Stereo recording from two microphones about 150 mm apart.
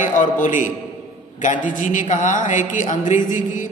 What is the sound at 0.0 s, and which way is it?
A man's voice, 60° left (ahead or behind).